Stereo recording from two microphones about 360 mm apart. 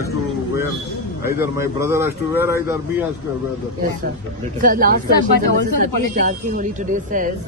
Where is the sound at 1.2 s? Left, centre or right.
Centre.